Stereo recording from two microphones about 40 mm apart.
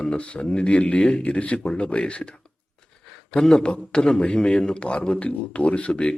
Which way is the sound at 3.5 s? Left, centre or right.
Left.